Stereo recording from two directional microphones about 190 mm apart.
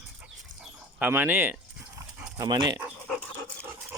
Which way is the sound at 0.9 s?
10° right (ahead or behind).